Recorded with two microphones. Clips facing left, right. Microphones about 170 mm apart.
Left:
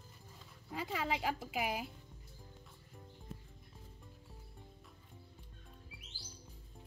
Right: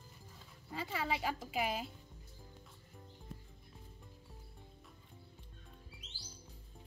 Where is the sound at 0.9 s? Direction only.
15° left (ahead or behind).